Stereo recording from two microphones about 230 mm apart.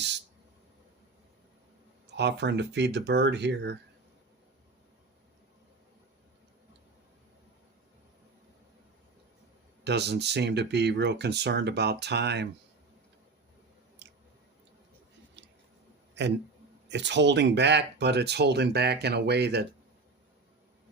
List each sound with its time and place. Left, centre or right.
2.1 s speech: right
9.8 s speech: right
14.0 s chewing: right
16.9 s speech: right